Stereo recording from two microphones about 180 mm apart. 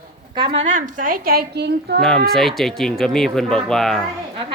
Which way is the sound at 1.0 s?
50° right (ahead or behind).